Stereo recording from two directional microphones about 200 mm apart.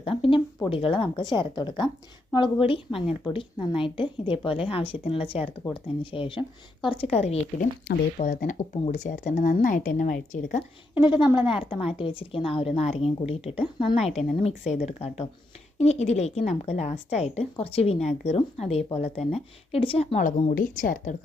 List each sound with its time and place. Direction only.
0.0 s a sound: 25° left (ahead or behind)
0.7 s a woman's voice: 25° left (ahead or behind)
11.0 s a woman's voice: 20° left (ahead or behind); by 21.2 s 40° left (ahead or behind)